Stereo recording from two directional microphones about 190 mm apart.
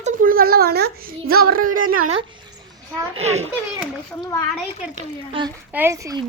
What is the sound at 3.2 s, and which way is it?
Speech, 35° right (ahead or behind).